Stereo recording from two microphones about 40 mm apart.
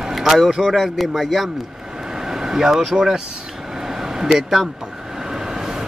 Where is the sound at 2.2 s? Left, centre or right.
Centre.